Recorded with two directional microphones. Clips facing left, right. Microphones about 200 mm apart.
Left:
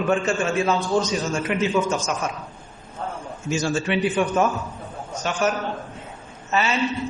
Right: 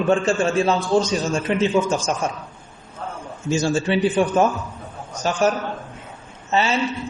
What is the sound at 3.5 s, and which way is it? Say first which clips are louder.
A man's voice: right 3 dB; 30° right (ahead or behind).